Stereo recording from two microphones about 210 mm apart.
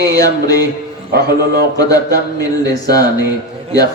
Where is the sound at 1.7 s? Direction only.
15° left (ahead or behind).